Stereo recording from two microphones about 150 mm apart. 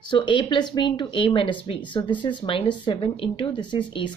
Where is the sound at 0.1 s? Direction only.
30° left (ahead or behind).